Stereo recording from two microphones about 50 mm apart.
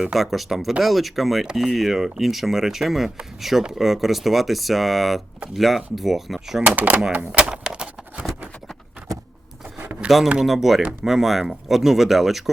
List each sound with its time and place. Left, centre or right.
0.0 s speech: centre
6.6 s speech: right
7.3 s a sound: centre
10.0 s speech: right
10.4 s speech: centre